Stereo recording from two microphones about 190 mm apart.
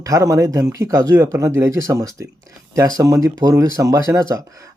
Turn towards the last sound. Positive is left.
turn(degrees=-15)  # may be behind; listen again after turning